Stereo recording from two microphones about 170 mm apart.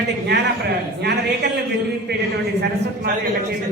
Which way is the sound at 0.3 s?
75° right (ahead or behind).